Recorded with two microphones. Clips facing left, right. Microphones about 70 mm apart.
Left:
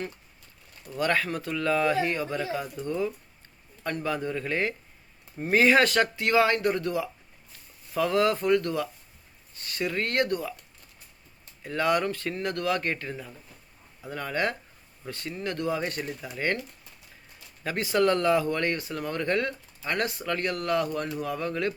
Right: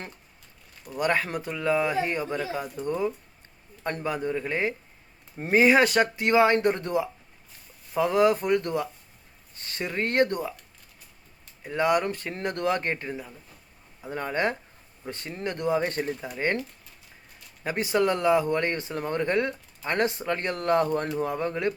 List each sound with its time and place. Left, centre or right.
0.9 s speech: right
11.6 s speech: centre
13.1 s speech: centre
14.0 s speech: right
17.6 s speech: right